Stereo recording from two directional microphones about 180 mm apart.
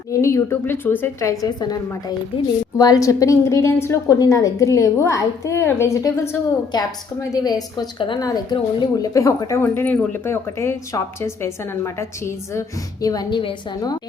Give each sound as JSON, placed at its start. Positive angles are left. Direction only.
{"t": 0.1, "sound": "a woman's voice", "side_deg": 15}